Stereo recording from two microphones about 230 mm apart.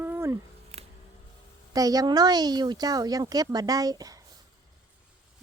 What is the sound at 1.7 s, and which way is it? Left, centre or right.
Speech, centre.